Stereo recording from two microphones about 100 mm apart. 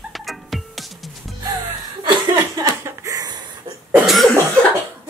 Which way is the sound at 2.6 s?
30° right (ahead or behind).